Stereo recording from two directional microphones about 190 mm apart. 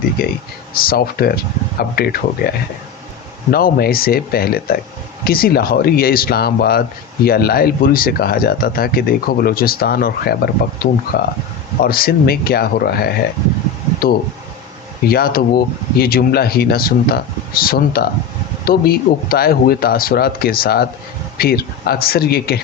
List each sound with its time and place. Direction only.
0.2 s speech: 50° left (ahead or behind)
3.5 s speech: 50° left (ahead or behind)